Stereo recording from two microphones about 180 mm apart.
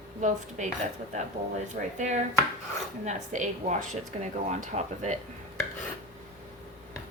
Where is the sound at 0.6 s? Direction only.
40° right (ahead or behind).